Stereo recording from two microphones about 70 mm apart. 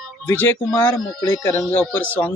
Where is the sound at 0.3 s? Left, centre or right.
Left.